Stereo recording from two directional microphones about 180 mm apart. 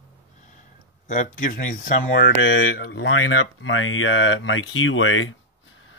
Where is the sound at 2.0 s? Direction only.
70° left (ahead or behind).